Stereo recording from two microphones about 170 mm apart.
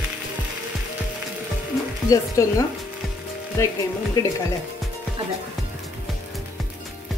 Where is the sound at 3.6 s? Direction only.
20° left (ahead or behind).